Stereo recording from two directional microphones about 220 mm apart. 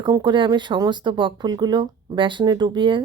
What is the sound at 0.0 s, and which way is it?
Speech, 20° right (ahead or behind).